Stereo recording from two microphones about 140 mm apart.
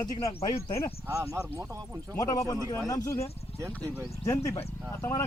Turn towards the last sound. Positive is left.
turn(degrees=20)  # may be behind; listen again after turning